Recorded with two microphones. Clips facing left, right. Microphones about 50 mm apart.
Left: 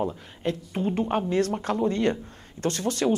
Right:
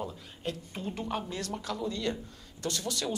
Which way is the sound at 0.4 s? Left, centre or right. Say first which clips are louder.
Left 9 dB; left.